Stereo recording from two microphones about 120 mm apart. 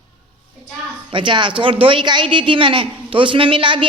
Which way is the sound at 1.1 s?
45° right (ahead or behind).